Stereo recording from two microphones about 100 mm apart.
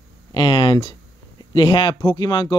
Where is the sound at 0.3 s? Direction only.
50° left (ahead or behind).